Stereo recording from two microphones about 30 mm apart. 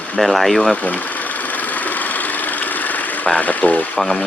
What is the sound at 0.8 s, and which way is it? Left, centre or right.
Engine, left.